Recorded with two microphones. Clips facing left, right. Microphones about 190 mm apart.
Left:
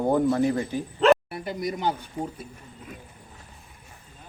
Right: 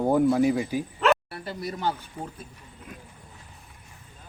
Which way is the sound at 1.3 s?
15° left (ahead or behind).